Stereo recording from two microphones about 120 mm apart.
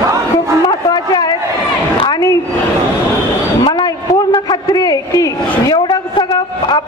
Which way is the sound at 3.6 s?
35° left (ahead or behind).